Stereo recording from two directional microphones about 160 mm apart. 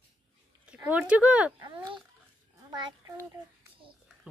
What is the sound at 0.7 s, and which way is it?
Speech, 10° right (ahead or behind).